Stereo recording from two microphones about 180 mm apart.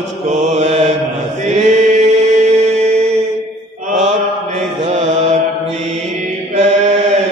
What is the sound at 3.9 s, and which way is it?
Mantra, 40° right (ahead or behind).